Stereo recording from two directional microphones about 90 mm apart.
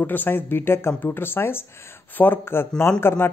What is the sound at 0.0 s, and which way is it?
Speech, 20° left (ahead or behind).